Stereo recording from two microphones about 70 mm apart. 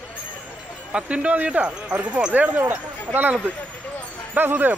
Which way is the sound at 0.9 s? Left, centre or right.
Centre.